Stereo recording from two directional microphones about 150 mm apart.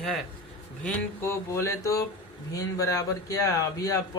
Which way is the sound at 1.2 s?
15° left (ahead or behind).